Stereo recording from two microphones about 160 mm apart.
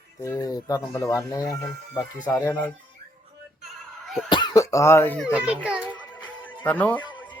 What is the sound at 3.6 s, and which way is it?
Music, centre (ahead or behind).